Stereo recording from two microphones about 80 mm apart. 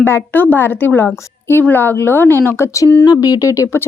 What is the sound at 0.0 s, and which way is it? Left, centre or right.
A woman's voice, left.